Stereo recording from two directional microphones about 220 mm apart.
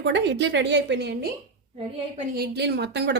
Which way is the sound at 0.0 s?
50° right (ahead or behind).